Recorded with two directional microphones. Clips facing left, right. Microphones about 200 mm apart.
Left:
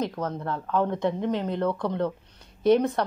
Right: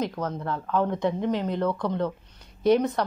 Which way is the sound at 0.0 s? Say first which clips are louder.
Even; 30° left (ahead or behind).